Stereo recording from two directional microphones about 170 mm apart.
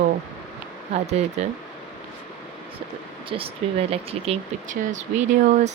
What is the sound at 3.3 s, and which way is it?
Speech, 35° right (ahead or behind).